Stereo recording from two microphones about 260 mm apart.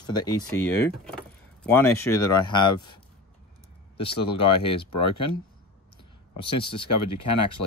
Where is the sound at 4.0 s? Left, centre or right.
Left.